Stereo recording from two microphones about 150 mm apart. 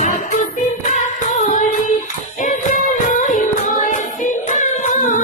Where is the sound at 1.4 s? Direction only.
55° left (ahead or behind).